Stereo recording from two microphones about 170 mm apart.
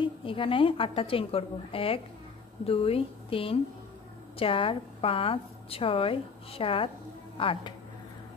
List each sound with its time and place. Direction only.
0.0 s a woman's voice: 30° left (ahead or behind)